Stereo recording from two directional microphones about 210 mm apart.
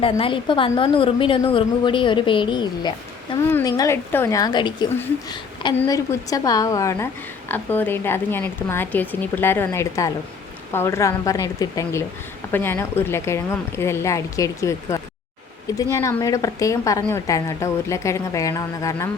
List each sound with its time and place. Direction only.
0.0 s a woman's voice: 25° left (ahead or behind)